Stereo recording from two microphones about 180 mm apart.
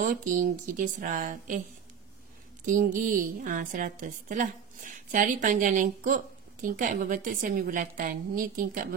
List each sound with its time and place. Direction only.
0.0 s a woman's voice: 50° right (ahead or behind)
2.6 s a woman's voice: 45° right (ahead or behind)